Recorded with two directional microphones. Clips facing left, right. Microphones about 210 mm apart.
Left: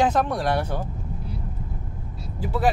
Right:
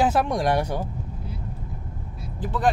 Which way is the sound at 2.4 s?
10° left (ahead or behind).